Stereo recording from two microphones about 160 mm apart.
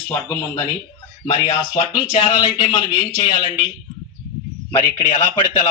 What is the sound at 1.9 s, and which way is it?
Speech, 25° left (ahead or behind).